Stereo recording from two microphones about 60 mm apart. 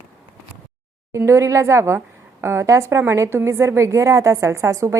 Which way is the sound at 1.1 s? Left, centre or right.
Right.